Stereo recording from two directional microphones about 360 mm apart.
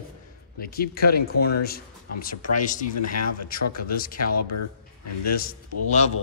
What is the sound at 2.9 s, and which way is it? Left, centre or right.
Speech, left.